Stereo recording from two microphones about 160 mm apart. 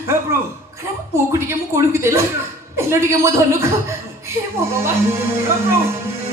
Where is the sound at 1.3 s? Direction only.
15° right (ahead or behind).